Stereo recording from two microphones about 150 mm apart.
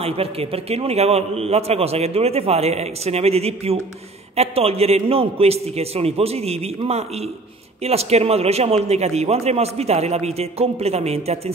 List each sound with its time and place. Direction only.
0.0 s a man's voice: 40° right (ahead or behind)